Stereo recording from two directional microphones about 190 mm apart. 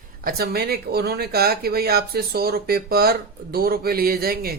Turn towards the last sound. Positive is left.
turn(degrees=-50)  # may be behind; listen again after turning